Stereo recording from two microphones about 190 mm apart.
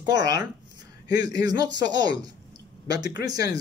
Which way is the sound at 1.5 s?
20° right (ahead or behind).